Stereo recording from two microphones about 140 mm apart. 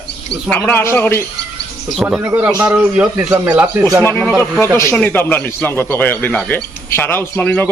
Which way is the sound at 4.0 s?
15° left (ahead or behind).